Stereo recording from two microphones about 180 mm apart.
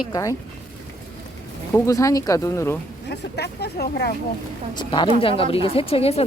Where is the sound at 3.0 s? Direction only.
70° left (ahead or behind).